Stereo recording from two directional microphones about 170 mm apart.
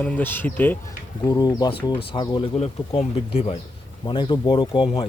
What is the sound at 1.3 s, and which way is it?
Speech, 25° left (ahead or behind).